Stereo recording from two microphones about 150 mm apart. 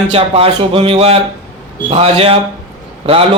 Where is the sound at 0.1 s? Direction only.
40° right (ahead or behind).